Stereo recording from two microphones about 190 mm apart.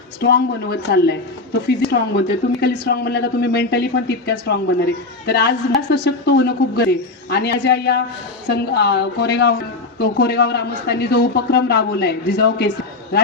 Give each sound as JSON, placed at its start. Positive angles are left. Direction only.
{"t": 0.2, "sound": "a woman's voice", "side_deg": 60}